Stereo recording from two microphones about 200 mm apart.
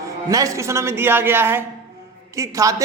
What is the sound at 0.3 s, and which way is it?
A man's voice, 15° right (ahead or behind).